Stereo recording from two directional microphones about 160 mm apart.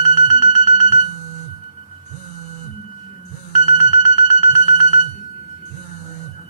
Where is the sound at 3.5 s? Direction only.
45° left (ahead or behind).